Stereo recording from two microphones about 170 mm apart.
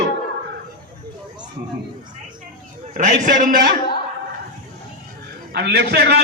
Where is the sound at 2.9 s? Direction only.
45° right (ahead or behind).